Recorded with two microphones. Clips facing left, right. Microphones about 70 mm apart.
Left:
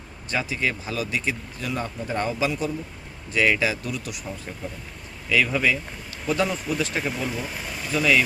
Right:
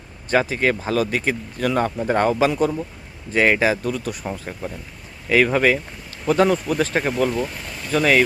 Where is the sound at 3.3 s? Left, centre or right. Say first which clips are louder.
Right 5 dB; right.